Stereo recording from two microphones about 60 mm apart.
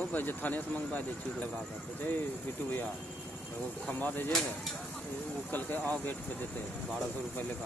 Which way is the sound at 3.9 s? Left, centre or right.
Left.